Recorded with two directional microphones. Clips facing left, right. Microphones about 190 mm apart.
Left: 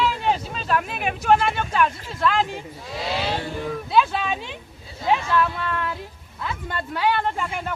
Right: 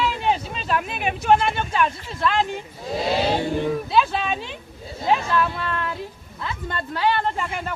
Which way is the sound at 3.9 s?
5° left (ahead or behind).